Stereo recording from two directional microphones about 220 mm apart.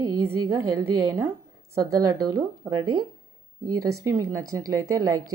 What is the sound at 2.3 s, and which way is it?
Speech, 15° right (ahead or behind).